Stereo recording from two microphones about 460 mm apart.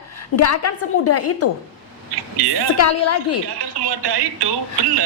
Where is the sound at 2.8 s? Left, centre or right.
Left.